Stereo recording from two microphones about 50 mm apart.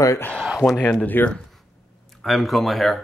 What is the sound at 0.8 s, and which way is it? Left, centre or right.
Speech, left.